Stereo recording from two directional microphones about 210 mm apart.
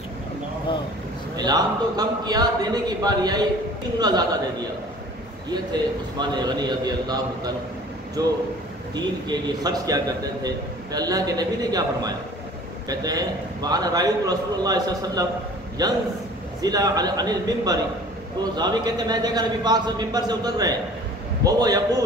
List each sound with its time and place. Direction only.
1.3 s speech: 20° right (ahead or behind)
5.5 s speech: 20° right (ahead or behind)
9.6 s a man's voice: 20° right (ahead or behind)